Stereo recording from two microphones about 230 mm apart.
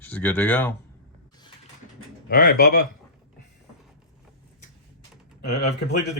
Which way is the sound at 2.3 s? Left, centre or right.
Left.